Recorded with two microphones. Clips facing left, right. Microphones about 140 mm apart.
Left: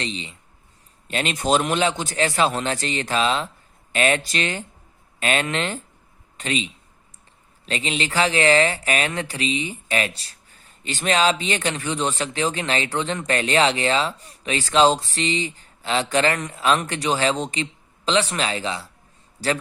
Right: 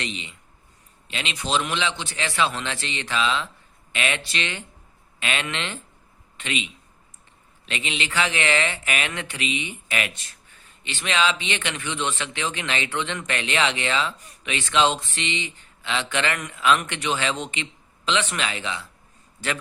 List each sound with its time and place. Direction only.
0.0 s speech: 35° left (ahead or behind)
1.0 s a man's voice: 45° left (ahead or behind)